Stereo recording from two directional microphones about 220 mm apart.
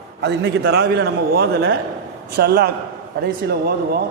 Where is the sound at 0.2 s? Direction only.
50° right (ahead or behind).